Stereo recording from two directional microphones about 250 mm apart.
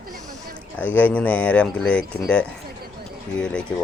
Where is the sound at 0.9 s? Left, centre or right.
Centre.